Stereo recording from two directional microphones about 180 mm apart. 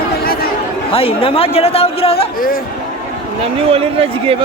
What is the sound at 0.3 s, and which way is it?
Chatter, 55° left (ahead or behind).